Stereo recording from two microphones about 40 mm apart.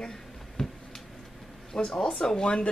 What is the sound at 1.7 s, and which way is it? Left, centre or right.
Speech, centre.